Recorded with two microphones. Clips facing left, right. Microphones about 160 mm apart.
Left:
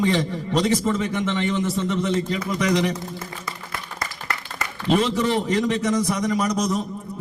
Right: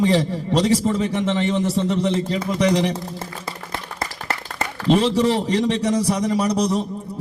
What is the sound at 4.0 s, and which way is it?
A man's voice, 30° right (ahead or behind).